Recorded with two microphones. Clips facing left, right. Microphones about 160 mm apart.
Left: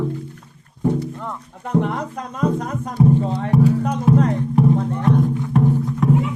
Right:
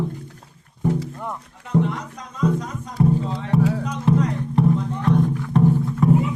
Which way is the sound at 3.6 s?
90° right.